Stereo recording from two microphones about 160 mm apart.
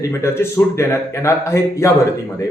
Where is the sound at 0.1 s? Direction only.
15° left (ahead or behind).